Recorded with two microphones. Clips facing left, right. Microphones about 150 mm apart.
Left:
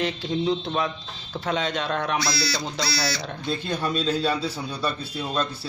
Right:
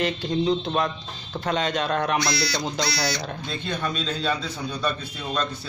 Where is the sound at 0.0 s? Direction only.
Centre (ahead or behind).